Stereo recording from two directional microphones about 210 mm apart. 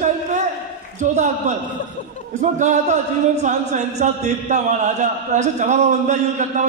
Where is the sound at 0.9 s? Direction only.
35° right (ahead or behind).